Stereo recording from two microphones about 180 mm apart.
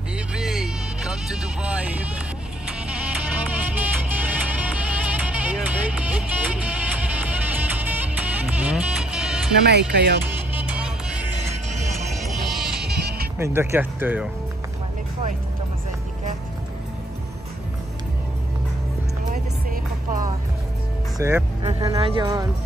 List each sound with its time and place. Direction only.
0.3 s vehicle: centre (ahead or behind)
3.7 s music: 10° right (ahead or behind)
9.7 s speech: 70° right (ahead or behind)
10.5 s music: 10° right (ahead or behind)
12.3 s music: centre (ahead or behind)
13.4 s speech: 15° right (ahead or behind)
19.3 s music: 50° right (ahead or behind)
21.2 s speech: 10° right (ahead or behind)
21.6 s speech: 35° right (ahead or behind)